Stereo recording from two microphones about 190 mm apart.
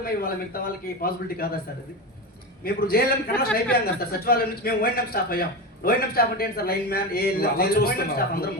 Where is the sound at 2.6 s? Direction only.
50° left (ahead or behind).